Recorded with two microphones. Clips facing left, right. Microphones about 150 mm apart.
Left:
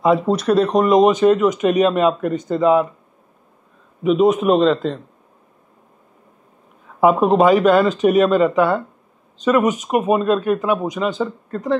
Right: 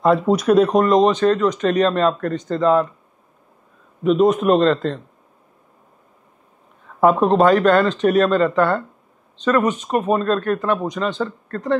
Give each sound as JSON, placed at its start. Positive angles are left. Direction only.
{"t": 0.3, "sound": "speech", "side_deg": -5}
{"t": 0.8, "sound": "speech", "side_deg": 10}
{"t": 4.0, "sound": "speech", "side_deg": 5}
{"t": 7.0, "sound": "speech", "side_deg": 5}